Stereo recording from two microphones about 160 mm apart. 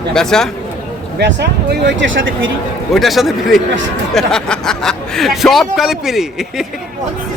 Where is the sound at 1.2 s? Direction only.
90° right.